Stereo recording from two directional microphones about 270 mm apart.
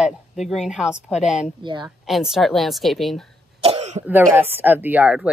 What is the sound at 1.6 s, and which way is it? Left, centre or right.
Speech, centre.